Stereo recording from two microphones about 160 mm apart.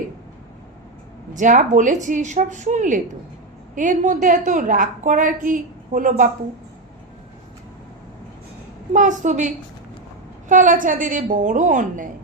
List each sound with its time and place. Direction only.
1.3 s a woman's voice: 50° right (ahead or behind)
8.9 s a woman's voice: 50° right (ahead or behind)
10.5 s a woman's voice: 55° right (ahead or behind)